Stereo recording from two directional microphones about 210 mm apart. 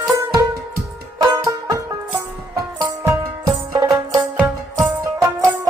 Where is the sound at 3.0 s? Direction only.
15° right (ahead or behind).